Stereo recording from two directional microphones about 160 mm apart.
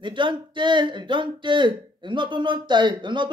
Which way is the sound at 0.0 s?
30° right (ahead or behind).